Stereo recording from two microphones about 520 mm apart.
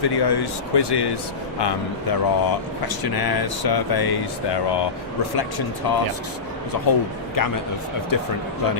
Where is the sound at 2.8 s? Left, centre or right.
Left.